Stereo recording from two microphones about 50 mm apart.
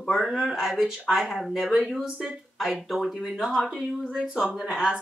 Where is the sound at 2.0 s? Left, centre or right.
Right.